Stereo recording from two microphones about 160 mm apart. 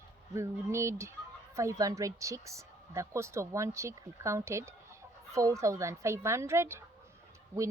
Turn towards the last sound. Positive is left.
turn(degrees=-15)  # may be behind; listen again after turning